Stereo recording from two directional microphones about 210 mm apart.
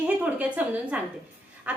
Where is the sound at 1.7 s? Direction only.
5° right (ahead or behind).